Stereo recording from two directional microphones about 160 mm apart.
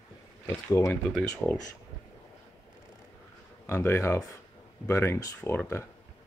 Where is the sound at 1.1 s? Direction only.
5° left (ahead or behind).